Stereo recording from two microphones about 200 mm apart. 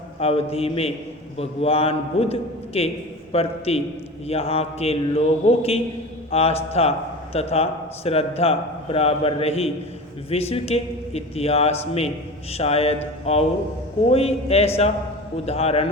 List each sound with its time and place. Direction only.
0.2 s a man's voice: 30° left (ahead or behind)